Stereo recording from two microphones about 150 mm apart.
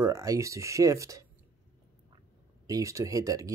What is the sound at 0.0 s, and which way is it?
Speech, 20° right (ahead or behind).